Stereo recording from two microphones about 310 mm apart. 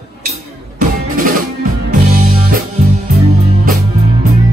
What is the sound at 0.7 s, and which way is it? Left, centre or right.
Music, right.